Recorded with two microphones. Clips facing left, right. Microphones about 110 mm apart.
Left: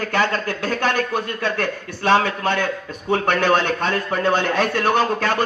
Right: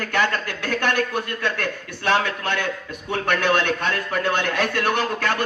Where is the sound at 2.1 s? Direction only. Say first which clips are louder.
Left 4 dB; 40° left (ahead or behind).